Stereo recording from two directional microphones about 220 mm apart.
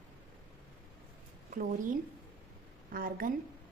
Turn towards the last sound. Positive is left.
turn(degrees=-40)  # may be behind; listen again after turning